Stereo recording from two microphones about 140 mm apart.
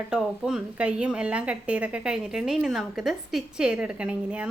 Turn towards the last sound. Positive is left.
turn(degrees=-10)  # may be behind; listen again after turning